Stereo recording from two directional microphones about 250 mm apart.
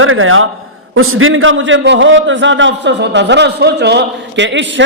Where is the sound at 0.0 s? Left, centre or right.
Right.